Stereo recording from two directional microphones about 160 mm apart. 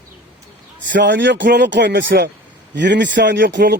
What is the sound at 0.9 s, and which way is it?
Speech, 90° right.